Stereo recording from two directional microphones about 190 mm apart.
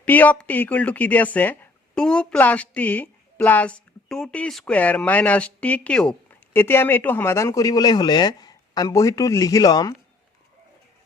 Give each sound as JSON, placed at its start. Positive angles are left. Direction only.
{"t": 0.0, "sound": "a woman's voice", "side_deg": 10}